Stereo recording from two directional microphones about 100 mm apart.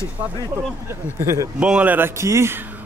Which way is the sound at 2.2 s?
30° right (ahead or behind).